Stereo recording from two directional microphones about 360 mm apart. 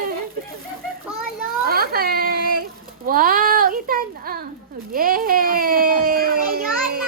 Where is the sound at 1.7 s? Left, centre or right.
Right.